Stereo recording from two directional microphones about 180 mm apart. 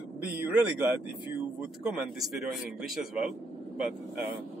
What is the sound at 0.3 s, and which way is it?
A man's voice, 10° right (ahead or behind).